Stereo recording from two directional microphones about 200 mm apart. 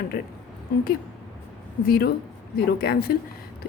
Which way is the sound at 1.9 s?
50° left (ahead or behind).